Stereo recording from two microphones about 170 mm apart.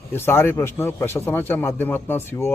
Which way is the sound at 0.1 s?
15° left (ahead or behind).